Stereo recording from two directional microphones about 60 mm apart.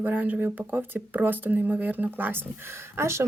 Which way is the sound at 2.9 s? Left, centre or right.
Right.